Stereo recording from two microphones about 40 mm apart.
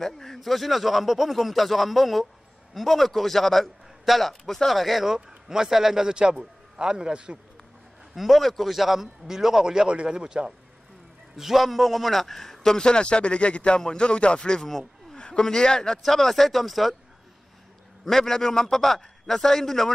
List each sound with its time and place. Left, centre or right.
0.0 s a man's voice: centre; by 7.3 s right
8.1 s a man's voice: centre
11.3 s a man's voice: centre
16.0 s a man's voice: centre
18.0 s a man's voice: centre